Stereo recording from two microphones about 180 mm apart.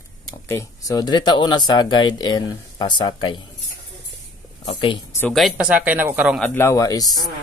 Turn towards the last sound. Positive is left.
turn(degrees=20)  # may be behind; listen again after turning